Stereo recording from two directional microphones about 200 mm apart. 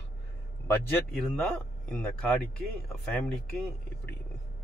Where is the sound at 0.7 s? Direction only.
5° left (ahead or behind).